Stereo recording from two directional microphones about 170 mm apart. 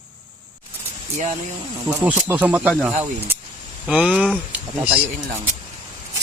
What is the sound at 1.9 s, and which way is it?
Speech, 10° right (ahead or behind).